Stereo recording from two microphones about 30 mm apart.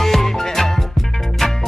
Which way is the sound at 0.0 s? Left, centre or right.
Centre.